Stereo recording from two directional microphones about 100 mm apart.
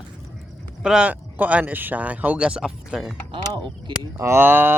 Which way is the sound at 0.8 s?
10° right (ahead or behind).